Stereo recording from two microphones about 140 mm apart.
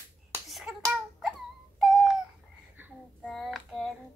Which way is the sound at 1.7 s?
Centre (ahead or behind).